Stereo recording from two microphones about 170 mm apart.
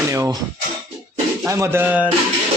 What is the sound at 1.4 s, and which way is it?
Speech, 15° right (ahead or behind).